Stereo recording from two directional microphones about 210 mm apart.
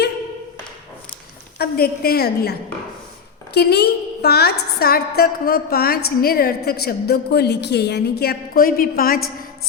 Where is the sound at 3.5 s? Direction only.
50° left (ahead or behind).